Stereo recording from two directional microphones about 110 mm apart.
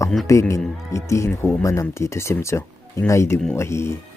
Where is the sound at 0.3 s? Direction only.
25° left (ahead or behind).